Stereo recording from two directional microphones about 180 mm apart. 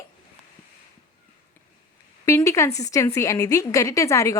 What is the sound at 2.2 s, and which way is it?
A woman's voice, 15° left (ahead or behind).